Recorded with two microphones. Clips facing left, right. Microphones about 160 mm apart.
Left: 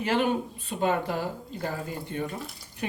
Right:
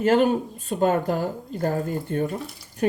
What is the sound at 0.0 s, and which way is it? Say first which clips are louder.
Speech: right 7 dB; 45° right (ahead or behind).